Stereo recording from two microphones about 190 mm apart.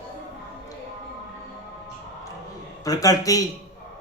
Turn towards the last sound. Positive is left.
turn(degrees=20)  # may be behind; listen again after turning